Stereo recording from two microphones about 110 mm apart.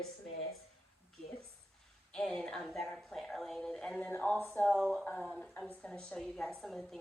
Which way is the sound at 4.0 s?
15° left (ahead or behind).